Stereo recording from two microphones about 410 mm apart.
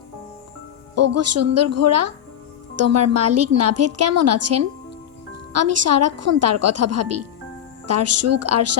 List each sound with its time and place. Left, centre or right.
0.9 s a woman's voice: right